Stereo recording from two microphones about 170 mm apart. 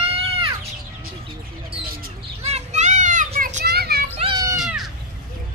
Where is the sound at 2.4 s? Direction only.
40° right (ahead or behind).